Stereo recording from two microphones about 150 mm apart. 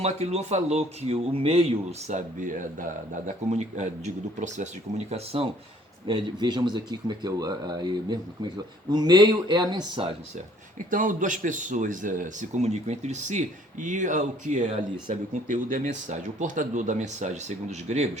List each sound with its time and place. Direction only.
0.0 s speech: 45° right (ahead or behind)
2.0 s speech: 55° right (ahead or behind)
3.2 s speech: 50° right (ahead or behind)
6.1 s speech: 30° right (ahead or behind)
10.9 s speech: 60° right (ahead or behind)